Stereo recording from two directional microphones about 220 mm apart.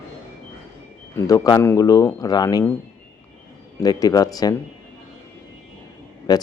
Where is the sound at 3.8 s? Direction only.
15° left (ahead or behind).